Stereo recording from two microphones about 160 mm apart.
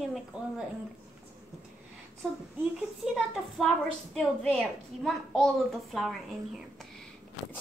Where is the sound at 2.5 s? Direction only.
Centre (ahead or behind).